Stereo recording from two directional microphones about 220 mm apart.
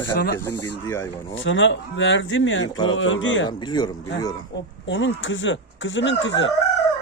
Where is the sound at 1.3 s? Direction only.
55° left (ahead or behind).